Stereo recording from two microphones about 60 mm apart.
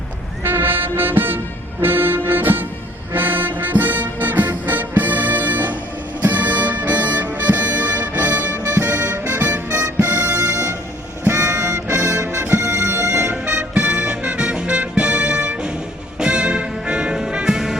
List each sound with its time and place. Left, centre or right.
0.4 s music: right
10.0 s music: right
10.5 s music: right
11.2 s music: right
13.2 s music: right